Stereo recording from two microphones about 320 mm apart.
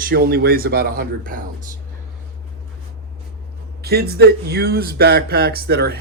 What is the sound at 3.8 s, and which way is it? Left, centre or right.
Speech, right.